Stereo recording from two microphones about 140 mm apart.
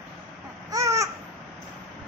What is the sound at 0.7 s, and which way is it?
Babbling, 25° right (ahead or behind).